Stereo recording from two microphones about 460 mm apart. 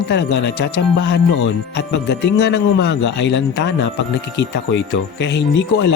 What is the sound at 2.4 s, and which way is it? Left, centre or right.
Speech, left.